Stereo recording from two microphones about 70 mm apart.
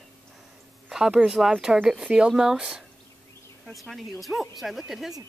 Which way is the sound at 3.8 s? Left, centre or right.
Centre.